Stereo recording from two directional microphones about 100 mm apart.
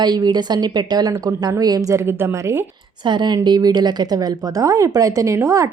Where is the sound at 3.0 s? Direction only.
50° right (ahead or behind).